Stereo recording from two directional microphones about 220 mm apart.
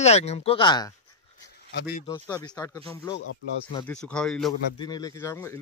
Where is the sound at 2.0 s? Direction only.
20° left (ahead or behind); by 4.5 s 5° left (ahead or behind).